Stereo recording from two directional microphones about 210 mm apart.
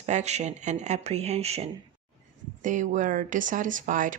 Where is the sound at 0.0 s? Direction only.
35° right (ahead or behind).